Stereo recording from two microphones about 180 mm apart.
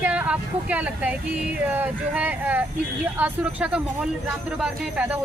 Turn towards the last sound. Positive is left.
turn(degrees=-5)  # may be behind; listen again after turning